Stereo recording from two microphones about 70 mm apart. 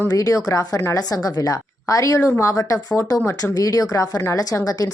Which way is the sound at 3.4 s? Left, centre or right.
Left.